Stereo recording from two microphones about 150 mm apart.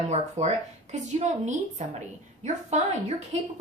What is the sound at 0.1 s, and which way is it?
A woman's voice, 45° right (ahead or behind).